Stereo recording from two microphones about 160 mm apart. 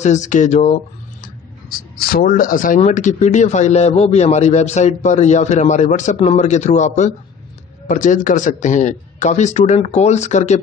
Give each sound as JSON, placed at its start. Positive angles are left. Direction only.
{"t": 0.0, "sound": "a man's voice", "side_deg": 50}
{"t": 1.2, "sound": "a sound", "side_deg": 65}
{"t": 2.8, "sound": "a man's voice", "side_deg": 50}